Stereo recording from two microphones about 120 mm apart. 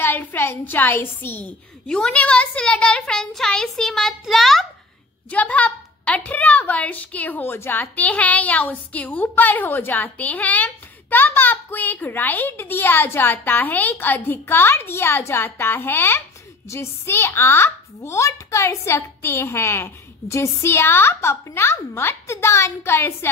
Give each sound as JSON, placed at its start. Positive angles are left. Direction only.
{"t": 0.0, "sound": "a woman's voice", "side_deg": 15}
{"t": 1.9, "sound": "a child's voice", "side_deg": 5}
{"t": 5.3, "sound": "a woman's voice", "side_deg": 10}